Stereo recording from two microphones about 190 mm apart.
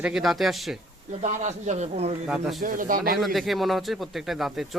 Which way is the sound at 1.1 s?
40° right (ahead or behind).